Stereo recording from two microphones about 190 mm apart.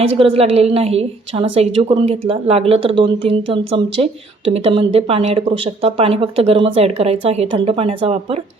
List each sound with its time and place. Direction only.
0.2 s speech: 30° right (ahead or behind)